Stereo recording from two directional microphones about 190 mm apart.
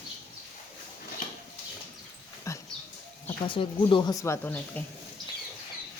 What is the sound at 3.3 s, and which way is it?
Speech, 25° left (ahead or behind).